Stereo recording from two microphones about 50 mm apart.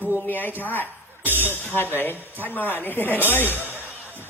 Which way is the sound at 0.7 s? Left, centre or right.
Left.